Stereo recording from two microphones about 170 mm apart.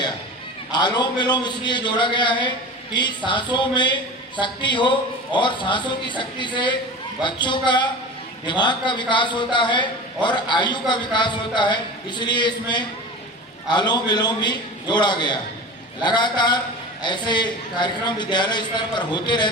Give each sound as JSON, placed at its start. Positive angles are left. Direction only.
{"t": 0.7, "sound": "a man's voice", "side_deg": 25}